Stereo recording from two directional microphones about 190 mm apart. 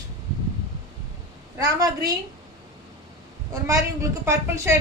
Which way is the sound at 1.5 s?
15° right (ahead or behind).